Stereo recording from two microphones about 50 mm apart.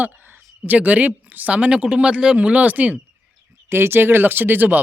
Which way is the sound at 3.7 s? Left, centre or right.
Right.